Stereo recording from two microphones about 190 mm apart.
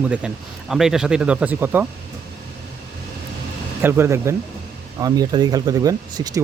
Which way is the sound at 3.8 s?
15° right (ahead or behind).